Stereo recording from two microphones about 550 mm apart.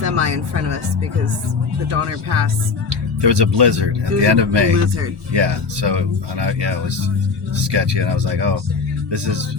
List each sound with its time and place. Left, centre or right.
0.0 s speech: right
1.9 s speech: right
3.2 s speech: right